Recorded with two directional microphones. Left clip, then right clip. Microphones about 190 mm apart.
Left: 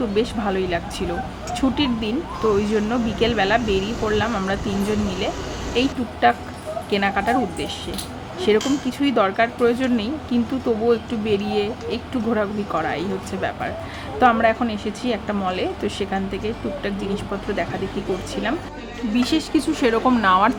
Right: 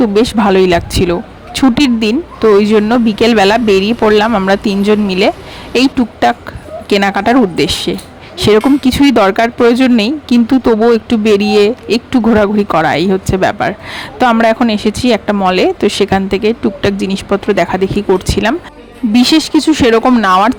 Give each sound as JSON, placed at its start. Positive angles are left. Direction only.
{"t": 0.1, "sound": "a woman's voice", "side_deg": -50}
{"t": 19.1, "sound": "a woman's voice", "side_deg": -50}